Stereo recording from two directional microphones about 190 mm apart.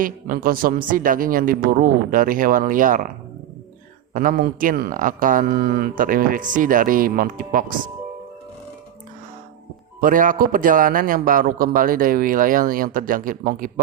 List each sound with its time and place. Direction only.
0.0 s speech: 50° right (ahead or behind)
4.1 s speech: 45° right (ahead or behind)
10.0 s speech: 45° right (ahead or behind)